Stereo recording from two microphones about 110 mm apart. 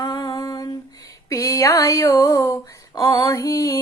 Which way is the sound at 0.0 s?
35° left (ahead or behind).